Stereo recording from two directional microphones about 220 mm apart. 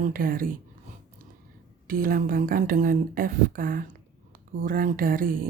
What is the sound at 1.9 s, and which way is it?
Speech, 40° right (ahead or behind).